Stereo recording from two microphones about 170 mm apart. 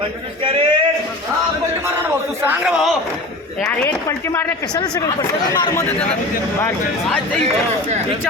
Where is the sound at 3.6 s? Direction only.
15° left (ahead or behind).